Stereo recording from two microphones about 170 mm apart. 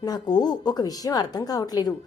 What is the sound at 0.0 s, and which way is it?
A woman's voice, 25° left (ahead or behind).